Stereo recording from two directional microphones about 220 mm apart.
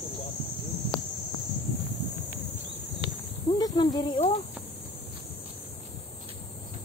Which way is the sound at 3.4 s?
20° left (ahead or behind).